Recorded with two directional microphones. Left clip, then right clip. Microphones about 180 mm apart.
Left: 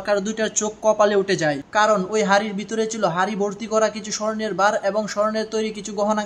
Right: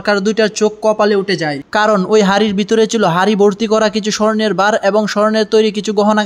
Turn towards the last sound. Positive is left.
turn(degrees=-40)  # may be behind; listen again after turning